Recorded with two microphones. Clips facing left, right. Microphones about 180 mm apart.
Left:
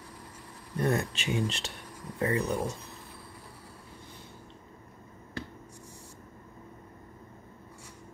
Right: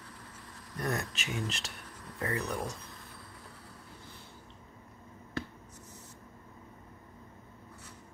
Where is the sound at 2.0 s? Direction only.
10° left (ahead or behind).